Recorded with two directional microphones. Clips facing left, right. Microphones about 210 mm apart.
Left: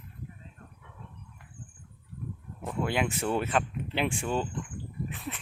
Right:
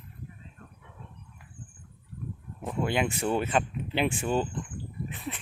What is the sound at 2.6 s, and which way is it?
Speech, centre (ahead or behind).